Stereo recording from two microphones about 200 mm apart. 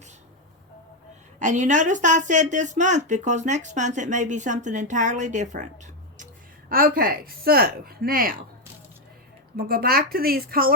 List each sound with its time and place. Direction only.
1.4 s speech: 40° right (ahead or behind)
6.7 s speech: 45° right (ahead or behind)
9.6 s speech: 50° right (ahead or behind)